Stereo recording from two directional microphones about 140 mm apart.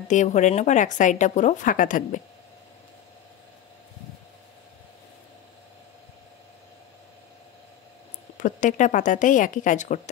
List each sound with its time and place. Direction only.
0.1 s a woman's voice: 60° left (ahead or behind)
8.4 s a woman's voice: 65° left (ahead or behind)